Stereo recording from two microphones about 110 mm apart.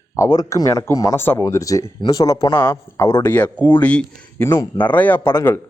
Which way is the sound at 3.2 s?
15° left (ahead or behind).